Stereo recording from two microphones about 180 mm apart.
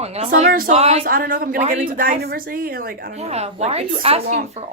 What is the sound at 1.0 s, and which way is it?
Speech, 55° right (ahead or behind).